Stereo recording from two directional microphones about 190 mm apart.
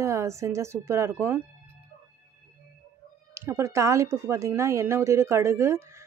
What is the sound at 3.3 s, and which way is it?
Speech, 15° right (ahead or behind).